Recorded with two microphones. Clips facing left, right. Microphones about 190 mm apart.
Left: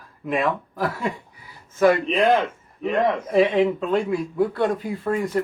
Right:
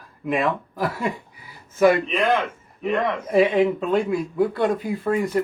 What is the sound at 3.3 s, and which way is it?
Speech, 5° right (ahead or behind).